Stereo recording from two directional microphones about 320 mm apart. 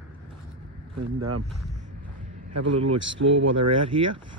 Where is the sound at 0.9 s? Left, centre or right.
Right.